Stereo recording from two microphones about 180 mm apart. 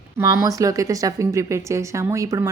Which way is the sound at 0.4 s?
20° right (ahead or behind).